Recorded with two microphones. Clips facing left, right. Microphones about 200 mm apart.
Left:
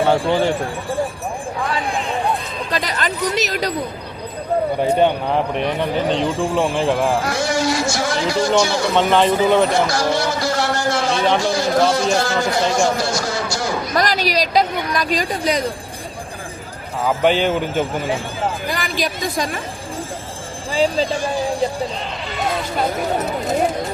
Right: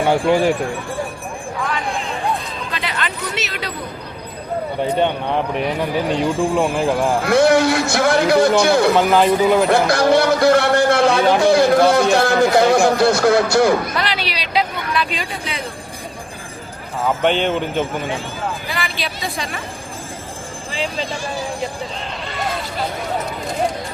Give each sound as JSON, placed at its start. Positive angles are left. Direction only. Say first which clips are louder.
{"t": 0.3, "sound": "speech", "louder": "right 2 dB", "side_deg": -15}
{"t": 2.6, "sound": "chatter", "louder": "left 4 dB", "side_deg": 40}
{"t": 4.9, "sound": "speech", "louder": "even", "side_deg": 5}
{"t": 7.3, "sound": "a man's voice", "louder": "right 6 dB", "side_deg": -60}
{"t": 9.0, "sound": "speech", "louder": "right 1 dB", "side_deg": -5}
{"t": 9.6, "sound": "a sound", "louder": "right 4 dB", "side_deg": -60}
{"t": 11.3, "sound": "a man's voice", "louder": "right 5 dB", "side_deg": -60}
{"t": 13.9, "sound": "a woman's voice", "louder": "left 5 dB", "side_deg": 40}
{"t": 17.2, "sound": "speech", "louder": "left 2 dB", "side_deg": 5}
{"t": 18.7, "sound": "speech", "louder": "left 3 dB", "side_deg": 45}
{"t": 20.7, "sound": "a woman's voice", "louder": "left 7 dB", "side_deg": 40}
{"t": 22.3, "sound": "a sound", "louder": "left 3 dB", "side_deg": 0}